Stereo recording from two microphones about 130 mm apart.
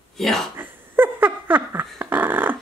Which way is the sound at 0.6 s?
15° right (ahead or behind).